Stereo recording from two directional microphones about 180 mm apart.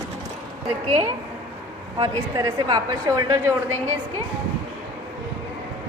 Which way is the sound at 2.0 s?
20° right (ahead or behind).